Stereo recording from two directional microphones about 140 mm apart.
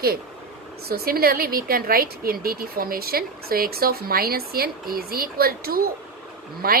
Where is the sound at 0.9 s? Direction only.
90° right.